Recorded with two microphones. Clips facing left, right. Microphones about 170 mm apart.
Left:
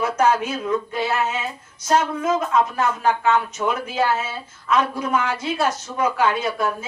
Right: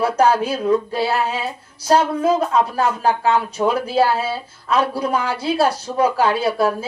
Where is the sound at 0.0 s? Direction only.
35° right (ahead or behind).